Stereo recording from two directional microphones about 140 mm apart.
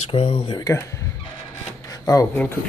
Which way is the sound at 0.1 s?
40° left (ahead or behind).